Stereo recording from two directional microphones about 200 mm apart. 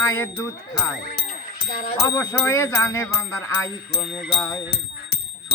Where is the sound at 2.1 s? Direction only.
15° left (ahead or behind).